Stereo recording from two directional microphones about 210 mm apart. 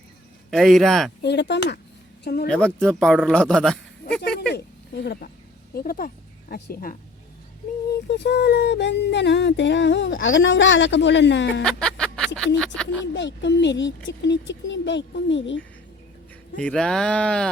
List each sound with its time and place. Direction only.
0.5 s speech: centre (ahead or behind)
1.2 s a sound: 55° left (ahead or behind)
2.2 s speech: 50° left (ahead or behind)
2.5 s speech: 5° left (ahead or behind)
4.5 s speech: 50° left (ahead or behind)
8.2 s a sound: 50° left (ahead or behind)
11.6 s music: 5° left (ahead or behind)
12.5 s speech: 5° left (ahead or behind)
13.0 s a sound: 60° left (ahead or behind)
16.6 s speech: 5° left (ahead or behind)